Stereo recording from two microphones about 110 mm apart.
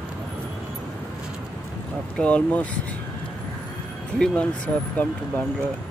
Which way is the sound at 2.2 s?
15° left (ahead or behind).